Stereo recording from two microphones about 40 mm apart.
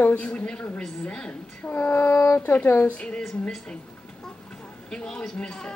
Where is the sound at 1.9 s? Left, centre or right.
Left.